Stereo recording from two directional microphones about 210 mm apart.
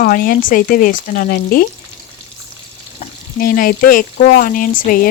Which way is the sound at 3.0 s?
40° left (ahead or behind).